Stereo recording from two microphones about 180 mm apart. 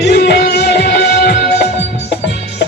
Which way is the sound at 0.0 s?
65° left (ahead or behind).